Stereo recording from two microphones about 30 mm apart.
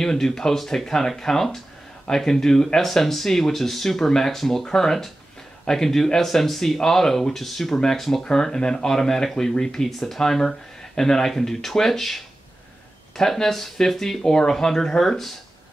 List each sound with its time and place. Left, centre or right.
0.0 s speech: centre
7.7 s speech: centre
9.8 s speech: centre